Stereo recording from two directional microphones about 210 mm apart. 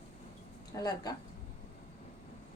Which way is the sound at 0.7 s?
20° left (ahead or behind).